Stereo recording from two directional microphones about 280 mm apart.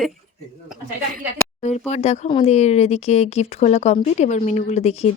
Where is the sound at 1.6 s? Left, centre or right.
Left.